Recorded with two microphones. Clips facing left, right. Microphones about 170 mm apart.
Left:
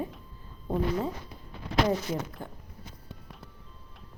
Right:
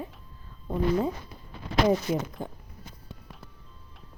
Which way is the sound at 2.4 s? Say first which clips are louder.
Right 5 dB; 20° right (ahead or behind).